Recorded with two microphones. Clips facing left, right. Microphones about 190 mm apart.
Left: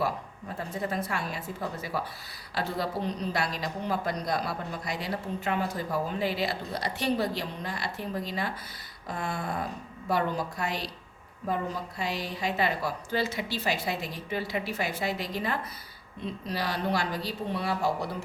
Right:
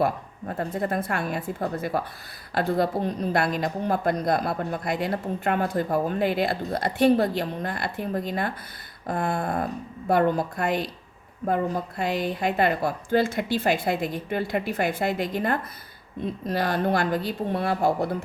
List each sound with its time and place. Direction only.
0.0 s a woman's voice: 55° right (ahead or behind)